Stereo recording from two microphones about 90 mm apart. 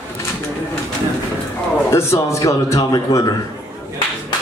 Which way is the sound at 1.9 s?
30° left (ahead or behind).